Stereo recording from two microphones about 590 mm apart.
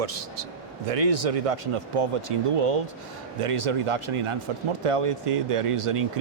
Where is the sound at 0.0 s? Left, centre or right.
Right.